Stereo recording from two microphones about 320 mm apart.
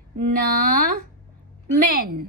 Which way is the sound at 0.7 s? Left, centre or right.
Right.